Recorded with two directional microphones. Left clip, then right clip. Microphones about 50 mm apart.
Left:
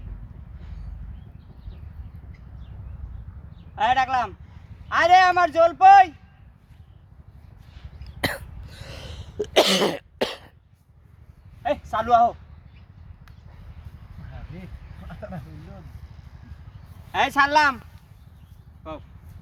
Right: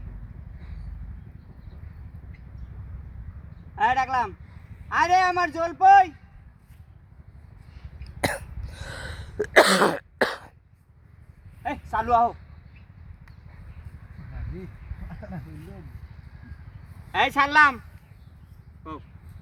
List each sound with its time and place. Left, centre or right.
3.8 s a man's voice: centre
8.0 s throat clearing: left
8.9 s gasp: right
9.6 s cough: right
11.6 s a sound: centre
14.6 s a sound: centre
17.1 s speech: centre